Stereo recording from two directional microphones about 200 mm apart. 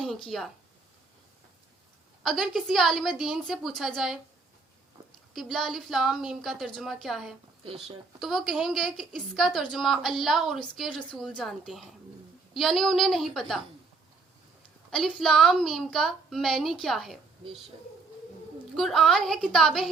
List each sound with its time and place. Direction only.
0.0 s speech: centre (ahead or behind)
2.2 s a woman's voice: centre (ahead or behind)
5.3 s a woman's voice: centre (ahead or behind)
7.6 s speech: 25° right (ahead or behind)
8.2 s a woman's voice: centre (ahead or behind)
14.8 s a woman's voice: centre (ahead or behind)
18.8 s a woman's voice: centre (ahead or behind)